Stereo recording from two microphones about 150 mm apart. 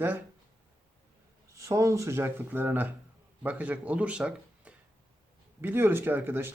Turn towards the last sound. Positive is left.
turn(degrees=-15)  # may be behind; listen again after turning